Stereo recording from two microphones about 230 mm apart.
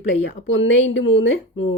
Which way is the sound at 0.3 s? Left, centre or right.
Left.